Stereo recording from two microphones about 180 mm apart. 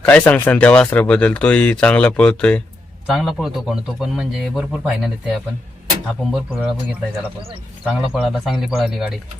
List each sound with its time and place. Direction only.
0.0 s a man's voice: 10° left (ahead or behind)
7.9 s a man's voice: centre (ahead or behind)